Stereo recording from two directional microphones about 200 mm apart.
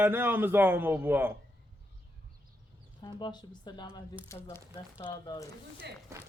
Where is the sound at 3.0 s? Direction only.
20° left (ahead or behind).